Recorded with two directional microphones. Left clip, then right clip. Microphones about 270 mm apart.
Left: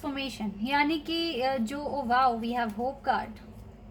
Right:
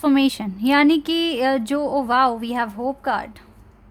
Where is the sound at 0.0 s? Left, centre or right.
Right.